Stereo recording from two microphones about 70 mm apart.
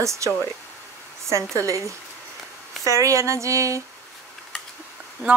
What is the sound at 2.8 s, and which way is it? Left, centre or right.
Speech, right.